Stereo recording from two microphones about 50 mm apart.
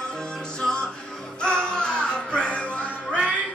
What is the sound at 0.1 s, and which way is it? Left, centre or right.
Music, centre.